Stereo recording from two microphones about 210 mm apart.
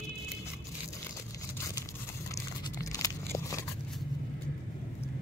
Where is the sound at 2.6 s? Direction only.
15° left (ahead or behind).